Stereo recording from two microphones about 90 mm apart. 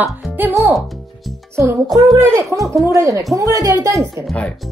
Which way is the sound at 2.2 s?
30° right (ahead or behind).